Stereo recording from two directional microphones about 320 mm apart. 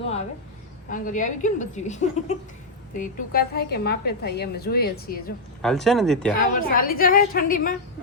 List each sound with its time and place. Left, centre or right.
0.9 s a woman's voice: left
5.6 s speech: centre
6.4 s a woman's voice: left